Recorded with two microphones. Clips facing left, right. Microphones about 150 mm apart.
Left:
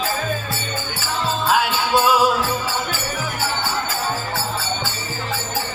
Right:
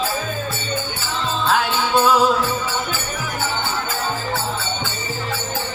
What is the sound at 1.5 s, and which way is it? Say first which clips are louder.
Music: even; 10° left (ahead or behind).